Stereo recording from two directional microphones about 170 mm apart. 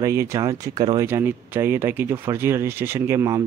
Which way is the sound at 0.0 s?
15° right (ahead or behind).